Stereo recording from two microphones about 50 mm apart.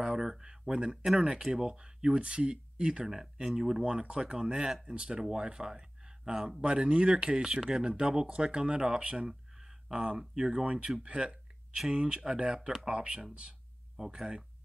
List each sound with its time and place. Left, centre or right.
0.0 s a sound: centre
1.2 s speech: centre
10.6 s speech: right